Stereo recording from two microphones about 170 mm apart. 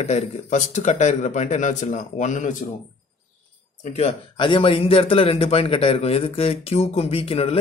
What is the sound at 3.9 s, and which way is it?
A man's voice, 35° left (ahead or behind).